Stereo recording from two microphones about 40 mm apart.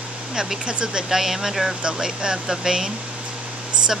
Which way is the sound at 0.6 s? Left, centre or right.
Right.